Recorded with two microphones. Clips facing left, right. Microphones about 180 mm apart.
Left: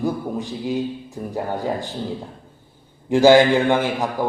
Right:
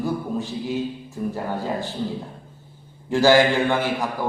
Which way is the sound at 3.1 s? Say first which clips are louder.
Left 4 dB; 20° left (ahead or behind).